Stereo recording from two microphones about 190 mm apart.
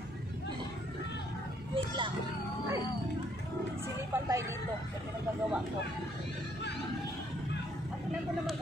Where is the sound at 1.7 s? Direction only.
25° right (ahead or behind).